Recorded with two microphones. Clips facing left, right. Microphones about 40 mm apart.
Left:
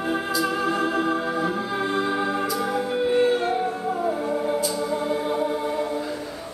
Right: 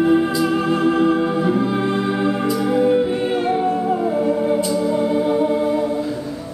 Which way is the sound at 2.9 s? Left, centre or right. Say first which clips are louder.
Right 3 dB; centre.